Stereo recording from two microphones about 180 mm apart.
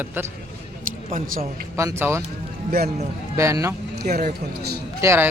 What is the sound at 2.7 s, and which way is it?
Speech, 55° right (ahead or behind).